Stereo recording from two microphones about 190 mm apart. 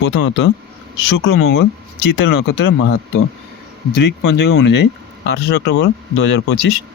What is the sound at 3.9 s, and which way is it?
Speech, 65° left (ahead or behind).